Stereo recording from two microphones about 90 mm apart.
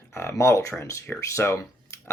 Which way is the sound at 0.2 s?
30° left (ahead or behind).